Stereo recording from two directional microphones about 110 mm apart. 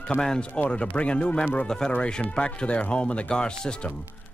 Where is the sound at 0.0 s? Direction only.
10° left (ahead or behind).